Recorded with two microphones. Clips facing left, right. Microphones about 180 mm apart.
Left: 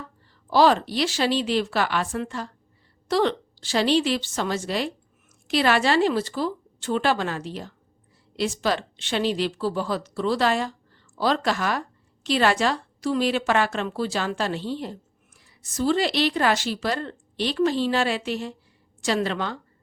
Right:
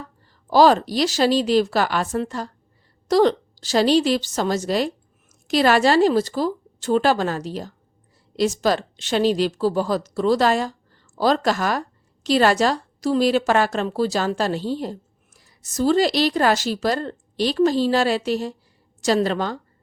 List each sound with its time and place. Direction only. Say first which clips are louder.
0.5 s a woman's voice: right 4 dB; 40° right (ahead or behind)